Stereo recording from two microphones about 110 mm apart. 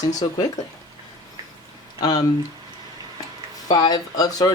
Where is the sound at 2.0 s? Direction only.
40° left (ahead or behind).